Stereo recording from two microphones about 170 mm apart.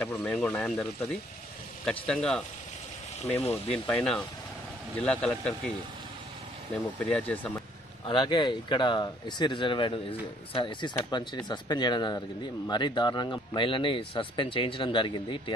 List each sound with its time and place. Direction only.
0.0 s speech: 10° left (ahead or behind)
3.7 s speech: 5° left (ahead or behind)
7.0 s speech: 5° left (ahead or behind)
8.1 s speech: 30° left (ahead or behind)